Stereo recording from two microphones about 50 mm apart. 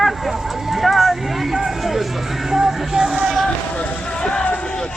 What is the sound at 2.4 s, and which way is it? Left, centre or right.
Music, centre.